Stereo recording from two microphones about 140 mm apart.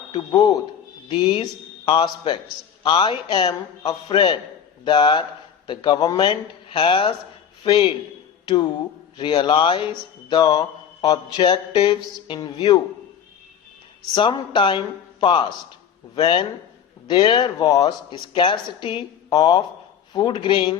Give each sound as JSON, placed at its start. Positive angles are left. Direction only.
{"t": 0.1, "sound": "a man's voice", "side_deg": 30}
{"t": 2.8, "sound": "mantra", "side_deg": 35}
{"t": 8.4, "sound": "mantra", "side_deg": 30}
{"t": 14.1, "sound": "mantra", "side_deg": 35}